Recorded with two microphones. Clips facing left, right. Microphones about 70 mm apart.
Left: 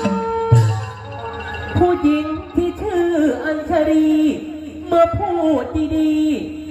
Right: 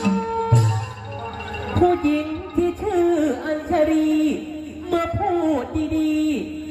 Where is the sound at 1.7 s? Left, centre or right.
Left.